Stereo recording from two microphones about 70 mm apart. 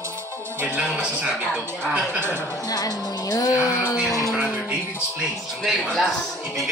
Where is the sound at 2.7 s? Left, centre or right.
Left.